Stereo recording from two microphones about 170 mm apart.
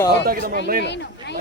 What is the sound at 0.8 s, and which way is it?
Speech, 90° left.